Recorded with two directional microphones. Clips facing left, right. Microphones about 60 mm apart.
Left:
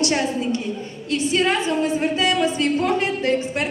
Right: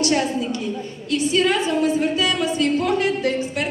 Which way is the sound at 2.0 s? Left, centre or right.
Left.